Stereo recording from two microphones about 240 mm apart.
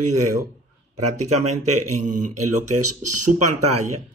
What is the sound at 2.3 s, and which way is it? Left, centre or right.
Speech, right.